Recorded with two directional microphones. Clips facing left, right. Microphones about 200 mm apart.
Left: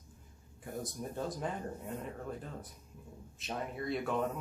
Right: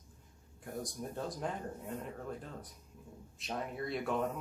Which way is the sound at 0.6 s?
Centre (ahead or behind).